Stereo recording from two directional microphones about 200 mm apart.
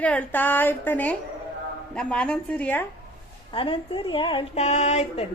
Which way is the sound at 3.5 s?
25° left (ahead or behind).